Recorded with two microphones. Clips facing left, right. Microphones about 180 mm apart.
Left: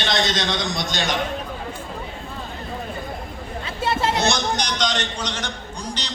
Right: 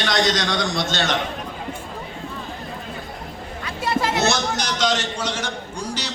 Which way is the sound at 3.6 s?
25° left (ahead or behind).